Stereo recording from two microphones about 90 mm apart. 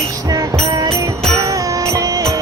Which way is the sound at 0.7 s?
35° right (ahead or behind).